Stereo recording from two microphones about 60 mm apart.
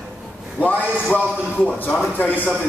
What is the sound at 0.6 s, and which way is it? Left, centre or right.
A man's voice, left.